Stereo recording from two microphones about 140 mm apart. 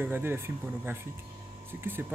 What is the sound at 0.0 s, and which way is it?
Speech, 15° right (ahead or behind).